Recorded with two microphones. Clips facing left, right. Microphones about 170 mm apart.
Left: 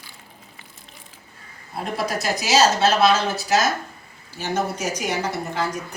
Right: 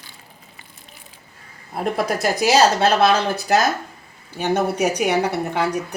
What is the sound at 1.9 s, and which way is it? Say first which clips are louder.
Speech: right 3 dB; 55° right (ahead or behind).